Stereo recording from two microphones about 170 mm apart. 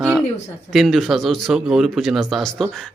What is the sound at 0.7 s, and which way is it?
Speech, centre (ahead or behind).